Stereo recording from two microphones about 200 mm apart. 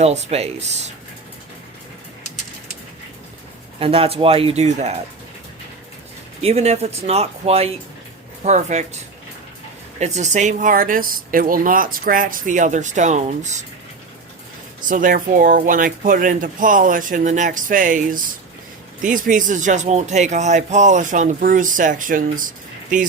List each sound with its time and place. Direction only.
0.0 s speech: 35° right (ahead or behind)
3.8 s speech: 30° right (ahead or behind)
6.4 s speech: 30° right (ahead or behind)
10.0 s speech: 35° right (ahead or behind)
14.8 s speech: 40° right (ahead or behind)